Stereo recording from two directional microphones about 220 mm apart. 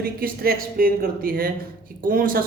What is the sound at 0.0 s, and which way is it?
Speech, 45° right (ahead or behind).